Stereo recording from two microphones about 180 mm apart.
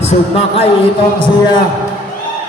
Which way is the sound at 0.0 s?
35° left (ahead or behind).